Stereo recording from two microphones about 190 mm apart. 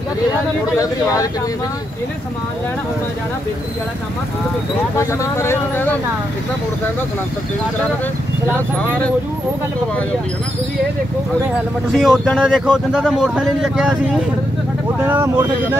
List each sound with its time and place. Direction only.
0.7 s speech: 20° left (ahead or behind)
4.9 s speech: 15° left (ahead or behind)
11.9 s speech: centre (ahead or behind)
15.0 s speech: 10° right (ahead or behind)